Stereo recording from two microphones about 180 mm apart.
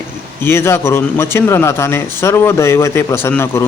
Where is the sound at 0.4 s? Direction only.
15° left (ahead or behind).